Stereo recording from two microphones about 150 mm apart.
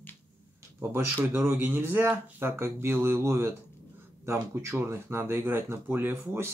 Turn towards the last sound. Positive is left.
turn(degrees=-15)  # may be behind; listen again after turning